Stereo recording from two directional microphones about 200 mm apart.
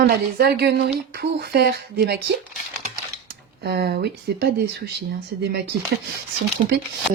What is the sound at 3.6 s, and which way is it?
Speech, 55° right (ahead or behind).